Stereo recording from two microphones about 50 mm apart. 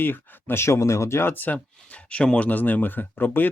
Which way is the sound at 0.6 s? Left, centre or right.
Left.